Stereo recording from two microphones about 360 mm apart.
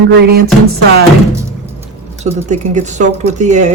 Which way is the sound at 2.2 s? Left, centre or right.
Centre.